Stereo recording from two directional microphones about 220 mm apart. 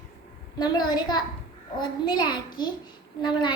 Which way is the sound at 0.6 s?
20° left (ahead or behind).